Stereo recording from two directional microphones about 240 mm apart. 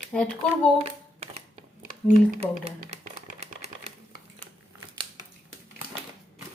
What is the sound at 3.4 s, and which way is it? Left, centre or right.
Typewriter, right.